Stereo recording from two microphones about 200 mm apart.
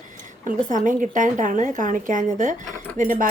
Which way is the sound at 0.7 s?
40° right (ahead or behind).